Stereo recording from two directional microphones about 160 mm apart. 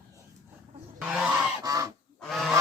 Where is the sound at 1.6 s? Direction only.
20° right (ahead or behind).